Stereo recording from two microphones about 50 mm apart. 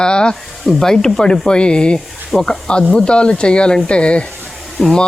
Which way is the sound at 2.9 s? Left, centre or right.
Centre.